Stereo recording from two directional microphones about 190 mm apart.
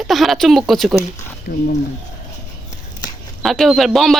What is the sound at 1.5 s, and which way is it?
Speech, 50° left (ahead or behind).